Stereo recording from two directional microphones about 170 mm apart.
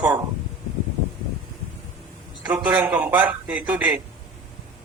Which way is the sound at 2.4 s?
10° right (ahead or behind).